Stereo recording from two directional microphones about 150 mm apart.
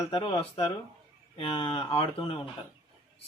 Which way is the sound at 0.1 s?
35° left (ahead or behind).